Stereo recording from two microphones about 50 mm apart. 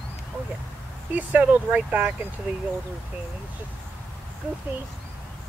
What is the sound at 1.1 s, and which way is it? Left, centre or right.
Speech, right.